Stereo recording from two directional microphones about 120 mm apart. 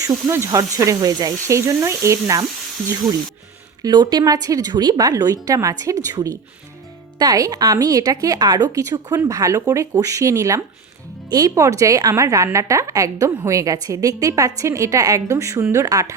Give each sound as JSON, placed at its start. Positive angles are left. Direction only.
{"t": 0.1, "sound": "a woman's voice", "side_deg": -25}
{"t": 3.8, "sound": "a woman's voice", "side_deg": -35}